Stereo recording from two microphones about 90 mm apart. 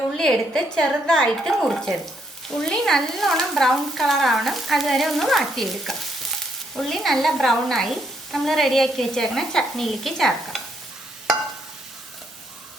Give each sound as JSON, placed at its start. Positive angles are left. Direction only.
{"t": 0.2, "sound": "a woman's voice", "side_deg": 5}